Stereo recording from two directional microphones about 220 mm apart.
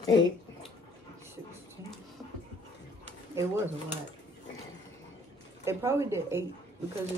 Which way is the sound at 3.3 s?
10° right (ahead or behind).